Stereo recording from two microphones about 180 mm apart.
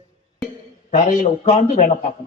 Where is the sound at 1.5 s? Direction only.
45° left (ahead or behind).